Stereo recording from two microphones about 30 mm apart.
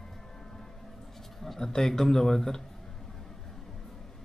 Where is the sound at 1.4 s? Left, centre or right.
Centre.